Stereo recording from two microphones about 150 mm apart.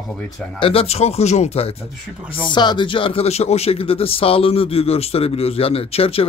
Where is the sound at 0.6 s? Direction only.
40° left (ahead or behind).